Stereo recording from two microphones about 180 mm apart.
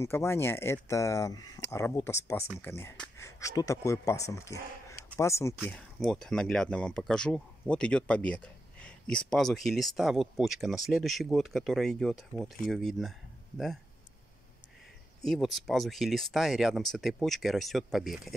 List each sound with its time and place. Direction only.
0.0 s speech: 15° left (ahead or behind)
5.7 s speech: 5° left (ahead or behind)
15.2 s speech: centre (ahead or behind)